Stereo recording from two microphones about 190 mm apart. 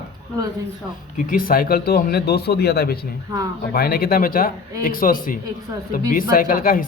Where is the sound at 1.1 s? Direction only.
50° left (ahead or behind).